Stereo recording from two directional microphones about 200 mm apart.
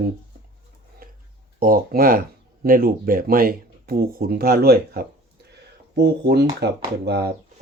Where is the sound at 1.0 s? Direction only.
45° right (ahead or behind).